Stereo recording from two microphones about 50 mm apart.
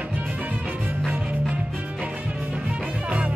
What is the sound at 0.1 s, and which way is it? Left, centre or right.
Music, right.